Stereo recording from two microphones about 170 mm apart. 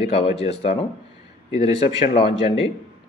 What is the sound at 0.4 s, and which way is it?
Speech, 35° left (ahead or behind).